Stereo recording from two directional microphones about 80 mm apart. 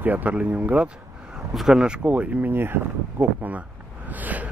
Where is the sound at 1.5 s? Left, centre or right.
Centre.